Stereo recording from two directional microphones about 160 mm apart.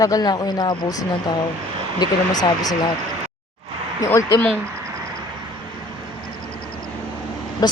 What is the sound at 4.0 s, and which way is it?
Speech, 20° left (ahead or behind).